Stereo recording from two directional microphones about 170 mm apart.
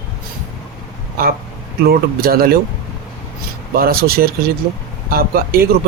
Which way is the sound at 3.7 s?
60° right (ahead or behind).